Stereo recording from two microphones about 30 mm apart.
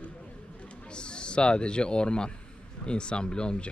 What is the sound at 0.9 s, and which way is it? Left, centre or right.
A man's voice, left.